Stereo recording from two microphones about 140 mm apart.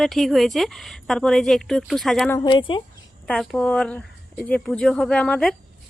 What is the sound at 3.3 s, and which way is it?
Speech, 5° left (ahead or behind).